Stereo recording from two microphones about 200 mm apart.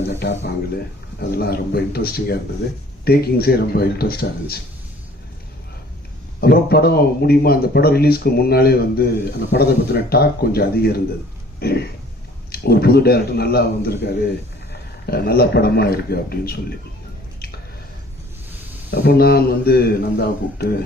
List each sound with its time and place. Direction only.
0.1 s speech: 60° left (ahead or behind)
1.4 s speech: 50° left (ahead or behind)
6.4 s a man's voice: 50° left (ahead or behind)
18.9 s speech: 55° left (ahead or behind)